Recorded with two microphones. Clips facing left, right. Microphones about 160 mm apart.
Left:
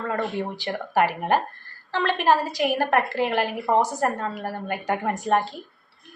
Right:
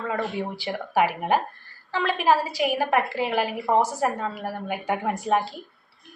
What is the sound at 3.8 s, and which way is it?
Speech, 15° left (ahead or behind).